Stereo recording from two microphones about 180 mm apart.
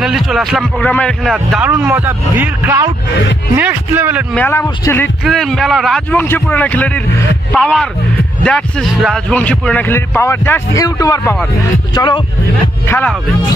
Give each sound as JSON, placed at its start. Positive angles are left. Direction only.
{"t": 0.0, "sound": "a man's voice", "side_deg": 0}
{"t": 4.4, "sound": "a man's voice", "side_deg": 15}
{"t": 5.2, "sound": "a man's voice", "side_deg": 0}
{"t": 12.8, "sound": "a man's voice", "side_deg": 10}